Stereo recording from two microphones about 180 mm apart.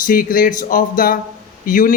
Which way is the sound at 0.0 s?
50° left (ahead or behind).